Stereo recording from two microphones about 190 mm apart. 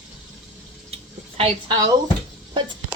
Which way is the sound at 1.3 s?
25° right (ahead or behind).